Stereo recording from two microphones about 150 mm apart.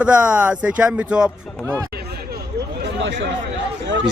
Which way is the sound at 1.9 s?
90° right.